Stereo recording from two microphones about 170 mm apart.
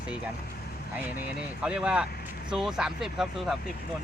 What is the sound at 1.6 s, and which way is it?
Speech, 5° right (ahead or behind).